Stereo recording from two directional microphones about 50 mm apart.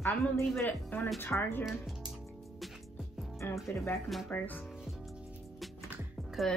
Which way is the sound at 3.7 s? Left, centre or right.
Left.